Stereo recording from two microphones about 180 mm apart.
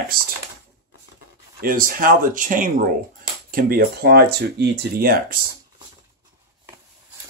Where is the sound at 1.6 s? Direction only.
50° right (ahead or behind).